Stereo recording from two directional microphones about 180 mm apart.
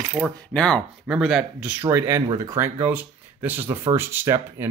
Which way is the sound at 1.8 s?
15° right (ahead or behind).